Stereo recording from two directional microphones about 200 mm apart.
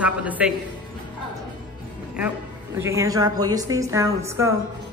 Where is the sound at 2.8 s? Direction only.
15° right (ahead or behind).